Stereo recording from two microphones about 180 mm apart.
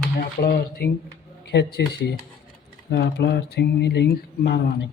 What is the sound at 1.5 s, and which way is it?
Speech, 70° left (ahead or behind).